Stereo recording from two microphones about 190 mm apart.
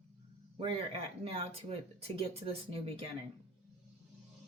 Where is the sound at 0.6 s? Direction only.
30° right (ahead or behind).